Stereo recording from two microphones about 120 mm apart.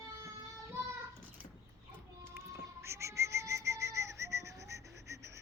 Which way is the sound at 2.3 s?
20° right (ahead or behind).